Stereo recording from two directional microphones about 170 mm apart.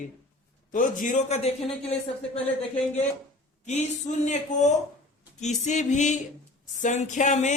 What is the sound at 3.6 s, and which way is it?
Speech, 40° left (ahead or behind).